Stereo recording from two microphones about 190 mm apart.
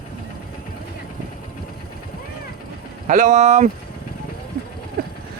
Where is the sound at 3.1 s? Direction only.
40° right (ahead or behind).